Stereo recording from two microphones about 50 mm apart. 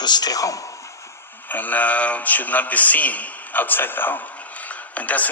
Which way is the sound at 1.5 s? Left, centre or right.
Left.